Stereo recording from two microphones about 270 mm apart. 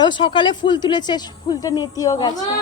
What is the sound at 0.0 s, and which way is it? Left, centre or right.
A man's voice, centre.